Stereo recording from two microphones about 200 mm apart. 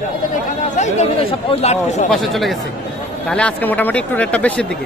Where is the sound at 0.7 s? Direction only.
35° left (ahead or behind).